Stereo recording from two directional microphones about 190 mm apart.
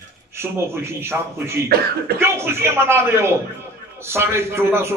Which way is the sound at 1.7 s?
55° right (ahead or behind).